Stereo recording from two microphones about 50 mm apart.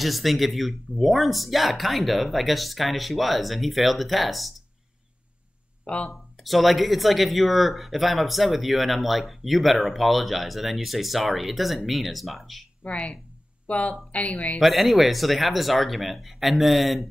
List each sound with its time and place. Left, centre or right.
0.0 s speech: centre
5.9 s speech: left
6.4 s speech: centre
12.8 s speech: left
14.6 s speech: centre